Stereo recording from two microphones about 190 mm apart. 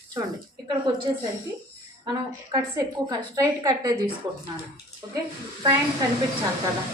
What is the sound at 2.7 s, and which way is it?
A woman's voice, 20° right (ahead or behind).